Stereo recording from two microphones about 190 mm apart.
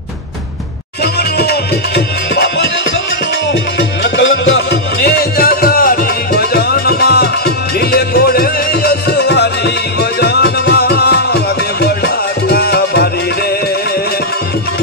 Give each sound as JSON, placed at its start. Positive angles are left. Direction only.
{"t": 1.4, "sound": "music", "side_deg": 60}
{"t": 4.0, "sound": "music", "side_deg": 70}
{"t": 5.4, "sound": "music", "side_deg": 50}